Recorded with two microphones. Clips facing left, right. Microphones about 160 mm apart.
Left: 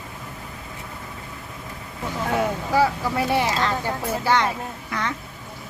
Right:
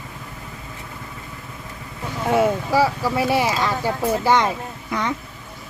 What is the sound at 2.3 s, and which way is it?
Speech, 10° right (ahead or behind).